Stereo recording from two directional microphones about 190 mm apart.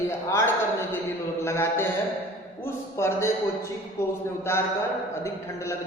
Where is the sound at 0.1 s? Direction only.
15° left (ahead or behind).